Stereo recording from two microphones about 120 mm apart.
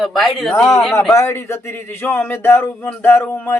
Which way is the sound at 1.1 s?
20° left (ahead or behind).